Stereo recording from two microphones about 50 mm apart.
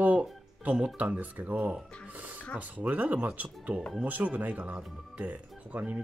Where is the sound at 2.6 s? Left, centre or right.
Right.